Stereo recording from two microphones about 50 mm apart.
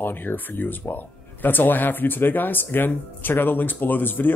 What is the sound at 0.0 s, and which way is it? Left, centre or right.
Speech, left.